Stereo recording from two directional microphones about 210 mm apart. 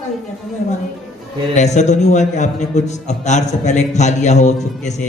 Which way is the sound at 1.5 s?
35° left (ahead or behind).